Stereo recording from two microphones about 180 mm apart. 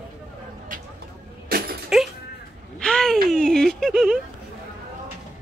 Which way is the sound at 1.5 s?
55° right (ahead or behind).